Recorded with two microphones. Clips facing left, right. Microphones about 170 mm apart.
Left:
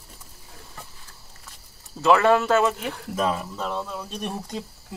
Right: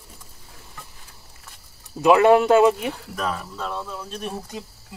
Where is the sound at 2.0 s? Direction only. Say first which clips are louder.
Right 4 dB; 15° right (ahead or behind).